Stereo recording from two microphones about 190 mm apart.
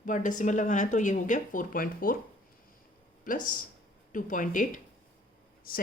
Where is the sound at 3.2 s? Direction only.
45° left (ahead or behind).